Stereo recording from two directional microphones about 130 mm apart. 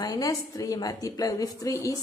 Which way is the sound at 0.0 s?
25° left (ahead or behind).